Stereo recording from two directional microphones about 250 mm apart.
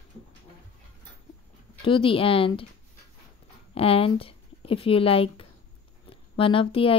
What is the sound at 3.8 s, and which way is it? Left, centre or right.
Speech, left.